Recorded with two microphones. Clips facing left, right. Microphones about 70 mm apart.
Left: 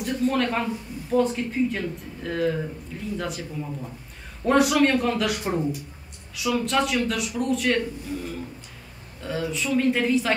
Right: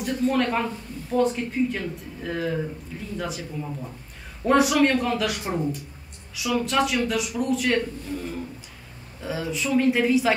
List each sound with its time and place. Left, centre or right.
0.0 s a man's voice: centre
9.2 s a man's voice: centre